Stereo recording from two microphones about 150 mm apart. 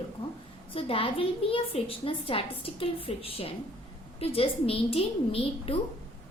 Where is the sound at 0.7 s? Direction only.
40° left (ahead or behind).